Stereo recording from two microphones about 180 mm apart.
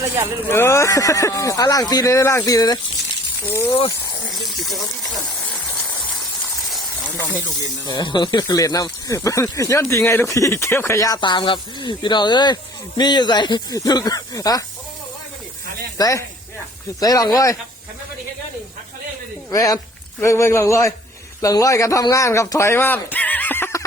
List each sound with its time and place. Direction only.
0.5 s speech: 15° left (ahead or behind)
4.3 s a sound: centre (ahead or behind)
7.9 s speech: 25° left (ahead or behind)
16.0 s speech: 20° left (ahead or behind)
19.5 s speech: 20° left (ahead or behind)